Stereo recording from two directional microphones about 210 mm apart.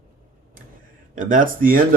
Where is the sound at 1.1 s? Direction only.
40° right (ahead or behind).